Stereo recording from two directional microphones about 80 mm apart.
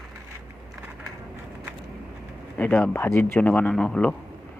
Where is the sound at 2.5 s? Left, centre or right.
Left.